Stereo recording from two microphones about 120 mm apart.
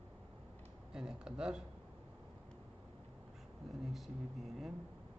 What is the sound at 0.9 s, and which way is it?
Speech, 5° right (ahead or behind).